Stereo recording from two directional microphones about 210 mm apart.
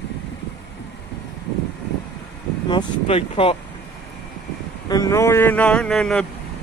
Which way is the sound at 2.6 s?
25° left (ahead or behind).